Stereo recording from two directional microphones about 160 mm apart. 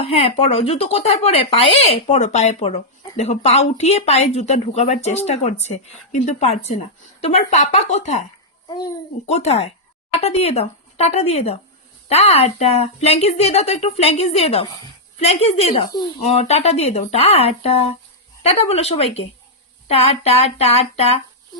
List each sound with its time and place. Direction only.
0.0 s speech: 35° left (ahead or behind)
9.2 s speech: 40° left (ahead or behind)